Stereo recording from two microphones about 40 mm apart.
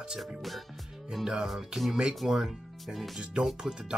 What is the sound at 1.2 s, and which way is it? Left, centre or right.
Speech, centre.